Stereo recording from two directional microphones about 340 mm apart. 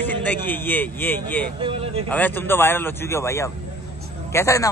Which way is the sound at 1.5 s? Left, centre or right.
Centre.